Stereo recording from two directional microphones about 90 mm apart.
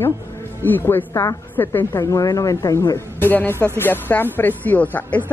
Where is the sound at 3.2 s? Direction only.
25° left (ahead or behind).